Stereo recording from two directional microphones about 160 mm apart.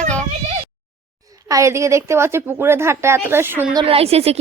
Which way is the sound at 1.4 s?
20° right (ahead or behind).